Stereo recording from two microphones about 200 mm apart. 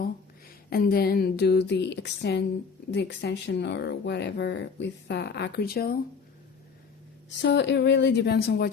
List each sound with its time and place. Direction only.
0.7 s speech: 50° left (ahead or behind)
7.3 s speech: 65° left (ahead or behind)